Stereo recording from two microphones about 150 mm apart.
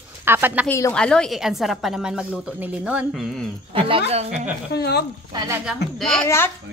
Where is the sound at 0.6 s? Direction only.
15° left (ahead or behind).